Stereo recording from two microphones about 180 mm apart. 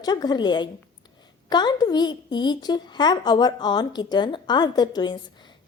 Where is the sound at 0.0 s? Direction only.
20° left (ahead or behind).